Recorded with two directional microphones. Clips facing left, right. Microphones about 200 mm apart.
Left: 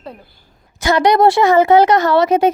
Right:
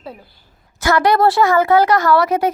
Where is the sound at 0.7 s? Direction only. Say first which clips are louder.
Left 2 dB; 20° left (ahead or behind).